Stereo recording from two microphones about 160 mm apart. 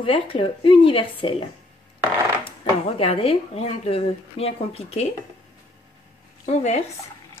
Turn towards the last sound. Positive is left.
turn(degrees=45)  # may be behind; listen again after turning